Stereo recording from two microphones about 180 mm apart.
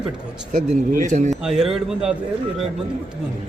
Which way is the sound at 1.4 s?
5° right (ahead or behind).